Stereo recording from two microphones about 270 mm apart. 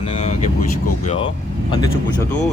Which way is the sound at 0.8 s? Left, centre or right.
Left.